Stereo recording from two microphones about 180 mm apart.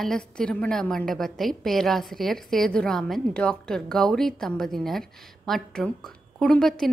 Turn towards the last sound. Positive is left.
turn(degrees=5)  # may be behind; listen again after turning